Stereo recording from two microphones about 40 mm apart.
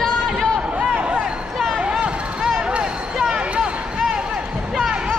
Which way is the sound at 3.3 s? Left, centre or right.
Right.